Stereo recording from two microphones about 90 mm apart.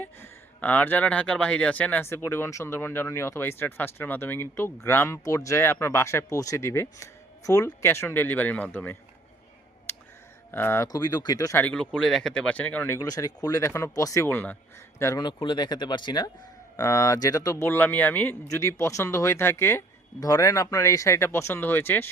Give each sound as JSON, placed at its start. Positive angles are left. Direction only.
{"t": 0.0, "sound": "speech", "side_deg": 20}
{"t": 10.5, "sound": "speech", "side_deg": 30}
{"t": 10.9, "sound": "speech", "side_deg": 45}
{"t": 11.9, "sound": "speech", "side_deg": 5}
{"t": 13.0, "sound": "speech", "side_deg": 40}
{"t": 14.3, "sound": "speech", "side_deg": 25}
{"t": 15.2, "sound": "speech", "side_deg": 60}
{"t": 16.7, "sound": "speech", "side_deg": 35}
{"t": 17.6, "sound": "speech", "side_deg": 25}
{"t": 18.4, "sound": "speech", "side_deg": 35}
{"t": 20.1, "sound": "speech", "side_deg": 40}